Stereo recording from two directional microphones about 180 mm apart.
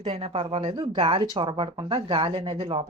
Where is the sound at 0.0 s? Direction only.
30° right (ahead or behind).